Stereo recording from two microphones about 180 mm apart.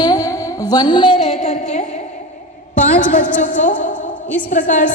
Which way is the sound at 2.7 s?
45° left (ahead or behind).